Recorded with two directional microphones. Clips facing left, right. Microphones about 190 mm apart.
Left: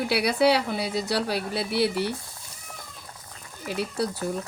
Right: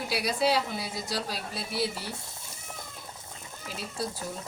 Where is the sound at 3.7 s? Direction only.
65° left (ahead or behind).